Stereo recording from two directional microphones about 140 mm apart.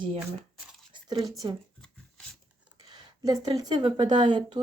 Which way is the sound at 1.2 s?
25° right (ahead or behind).